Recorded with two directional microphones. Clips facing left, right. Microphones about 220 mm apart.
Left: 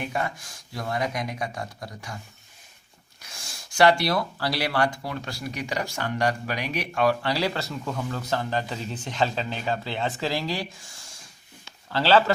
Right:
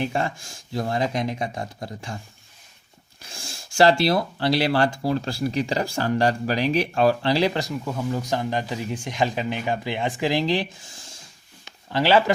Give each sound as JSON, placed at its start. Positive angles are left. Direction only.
{"t": 0.0, "sound": "speech", "side_deg": -30}
{"t": 3.2, "sound": "speech", "side_deg": -30}
{"t": 11.6, "sound": "a sound", "side_deg": -15}